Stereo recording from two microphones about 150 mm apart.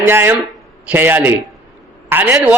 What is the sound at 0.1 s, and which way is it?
A man's voice, 15° right (ahead or behind).